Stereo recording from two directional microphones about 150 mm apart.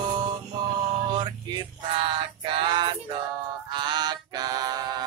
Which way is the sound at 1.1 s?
30° right (ahead or behind).